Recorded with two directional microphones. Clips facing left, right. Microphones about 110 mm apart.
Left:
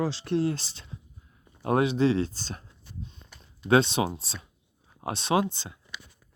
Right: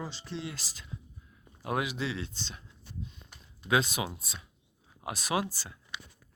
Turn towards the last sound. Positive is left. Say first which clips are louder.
# left 6 dB
turn(degrees=25)  # may be behind; listen again after turning